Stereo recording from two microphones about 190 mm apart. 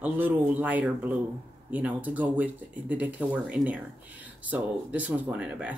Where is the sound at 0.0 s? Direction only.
10° right (ahead or behind).